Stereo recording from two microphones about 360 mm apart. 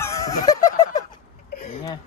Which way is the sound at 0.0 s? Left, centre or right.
Centre.